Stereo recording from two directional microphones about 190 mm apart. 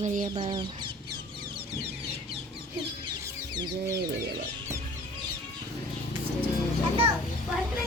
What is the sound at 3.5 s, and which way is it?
Speech, 25° right (ahead or behind).